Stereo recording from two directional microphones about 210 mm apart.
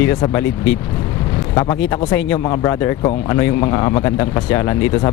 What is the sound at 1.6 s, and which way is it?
Speech, 15° left (ahead or behind).